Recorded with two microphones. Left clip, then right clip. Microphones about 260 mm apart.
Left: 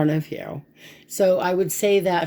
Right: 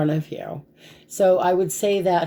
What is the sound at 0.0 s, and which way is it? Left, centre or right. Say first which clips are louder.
Speech: left 1 dB; left.